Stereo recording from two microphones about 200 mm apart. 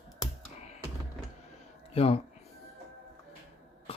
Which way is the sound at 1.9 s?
30° left (ahead or behind).